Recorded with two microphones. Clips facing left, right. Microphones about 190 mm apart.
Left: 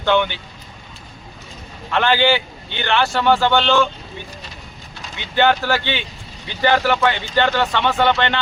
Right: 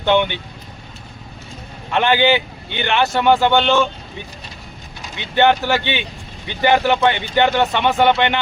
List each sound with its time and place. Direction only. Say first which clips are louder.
0.0 s speech: right 1 dB; 20° right (ahead or behind)
1.9 s a man's voice: right 1 dB; 15° right (ahead or behind)
5.3 s a man's voice: right 2 dB; 20° right (ahead or behind)